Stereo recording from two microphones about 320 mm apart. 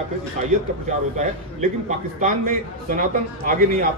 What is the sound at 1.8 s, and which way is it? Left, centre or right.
A man's voice, right.